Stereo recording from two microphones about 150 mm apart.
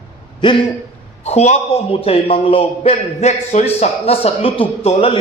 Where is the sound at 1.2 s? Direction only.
45° left (ahead or behind).